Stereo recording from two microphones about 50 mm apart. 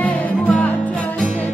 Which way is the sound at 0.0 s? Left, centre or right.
Left.